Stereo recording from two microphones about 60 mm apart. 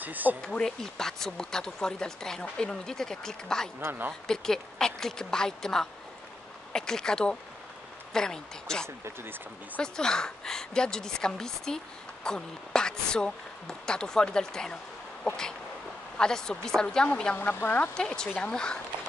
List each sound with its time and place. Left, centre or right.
0.0 s speech: right
0.6 s a woman's voice: centre
8.8 s speech: right
9.8 s a woman's voice: centre
16.2 s a woman's voice: centre
17.4 s speech: left
17.9 s a woman's voice: centre